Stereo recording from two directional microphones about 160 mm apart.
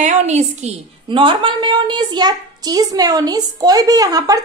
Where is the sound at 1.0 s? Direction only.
30° right (ahead or behind).